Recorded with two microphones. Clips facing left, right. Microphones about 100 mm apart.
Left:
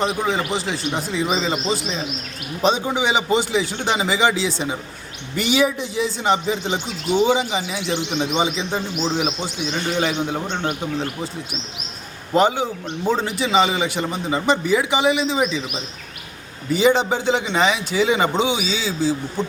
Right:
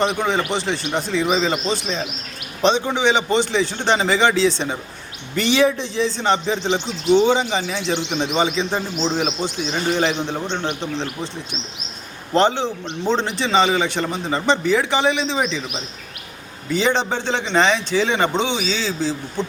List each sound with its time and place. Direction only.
0.0 s a man's voice: centre (ahead or behind)
8.4 s a man's voice: 40° right (ahead or behind)
9.0 s speech: 5° left (ahead or behind)
9.7 s a man's voice: 35° right (ahead or behind)
10.2 s a man's voice: 10° left (ahead or behind)
12.3 s a man's voice: 10° left (ahead or behind)